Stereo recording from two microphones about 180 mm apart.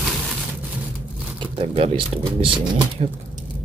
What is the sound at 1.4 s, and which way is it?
Speech, 30° right (ahead or behind).